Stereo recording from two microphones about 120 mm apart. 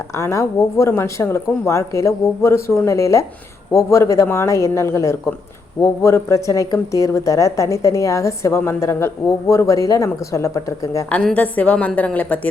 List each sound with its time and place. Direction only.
0.2 s a woman's voice: 25° left (ahead or behind)
11.1 s a woman's voice: 10° left (ahead or behind)